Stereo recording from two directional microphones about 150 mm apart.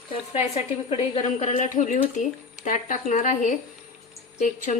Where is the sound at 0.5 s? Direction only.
45° left (ahead or behind).